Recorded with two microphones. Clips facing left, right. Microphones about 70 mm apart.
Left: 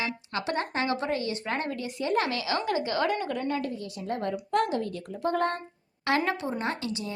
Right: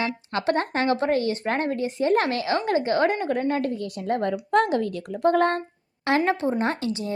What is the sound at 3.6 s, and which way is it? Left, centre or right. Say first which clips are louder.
A woman's voice: right 6 dB; right.